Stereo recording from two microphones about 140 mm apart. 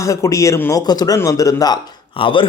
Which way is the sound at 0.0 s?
20° left (ahead or behind).